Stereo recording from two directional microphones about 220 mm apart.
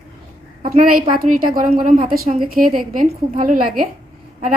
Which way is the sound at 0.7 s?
40° right (ahead or behind).